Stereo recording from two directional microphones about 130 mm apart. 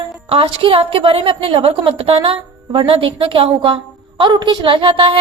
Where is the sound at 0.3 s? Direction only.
45° right (ahead or behind).